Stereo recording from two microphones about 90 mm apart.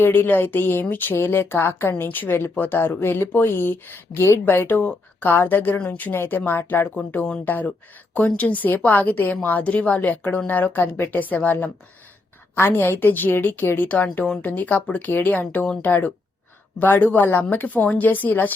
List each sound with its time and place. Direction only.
0.0 s a woman's voice: 25° left (ahead or behind)